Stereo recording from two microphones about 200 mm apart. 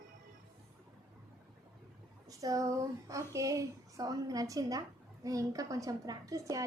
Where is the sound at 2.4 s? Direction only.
15° right (ahead or behind).